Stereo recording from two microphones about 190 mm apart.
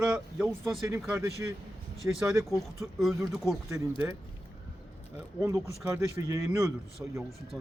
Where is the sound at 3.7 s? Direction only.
15° right (ahead or behind).